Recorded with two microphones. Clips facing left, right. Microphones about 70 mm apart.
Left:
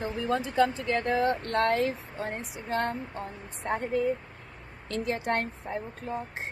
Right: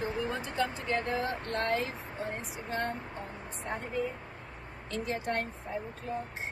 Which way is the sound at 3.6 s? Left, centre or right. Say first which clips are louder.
Left 7 dB; left.